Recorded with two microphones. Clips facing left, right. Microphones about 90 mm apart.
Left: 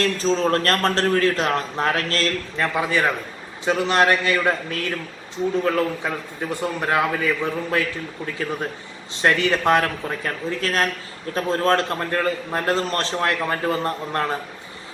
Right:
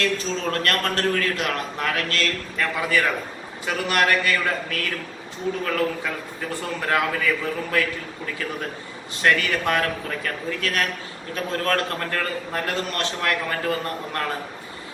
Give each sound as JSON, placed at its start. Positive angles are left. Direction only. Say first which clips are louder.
{"t": 0.0, "sound": "a man's voice", "louder": "left 5 dB", "side_deg": 35}
{"t": 9.2, "sound": "a man's voice", "louder": "left 3 dB", "side_deg": 25}